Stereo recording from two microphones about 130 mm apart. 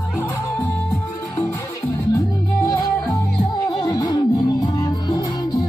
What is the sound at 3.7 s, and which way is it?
Music, 30° left (ahead or behind).